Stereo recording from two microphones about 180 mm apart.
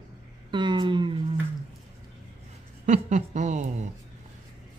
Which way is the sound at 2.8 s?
40° right (ahead or behind).